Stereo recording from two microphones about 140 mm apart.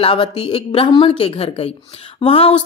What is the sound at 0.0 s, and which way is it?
A woman's voice, 40° left (ahead or behind).